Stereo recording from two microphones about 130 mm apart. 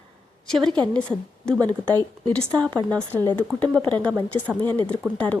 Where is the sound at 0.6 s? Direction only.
35° right (ahead or behind).